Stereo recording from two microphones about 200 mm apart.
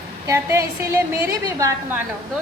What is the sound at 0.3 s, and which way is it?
A woman's voice, 15° right (ahead or behind).